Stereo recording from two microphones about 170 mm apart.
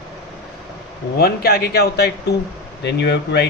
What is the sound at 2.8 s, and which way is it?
Speech, 80° left.